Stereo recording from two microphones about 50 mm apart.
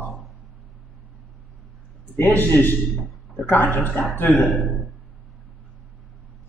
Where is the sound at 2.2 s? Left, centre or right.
Left.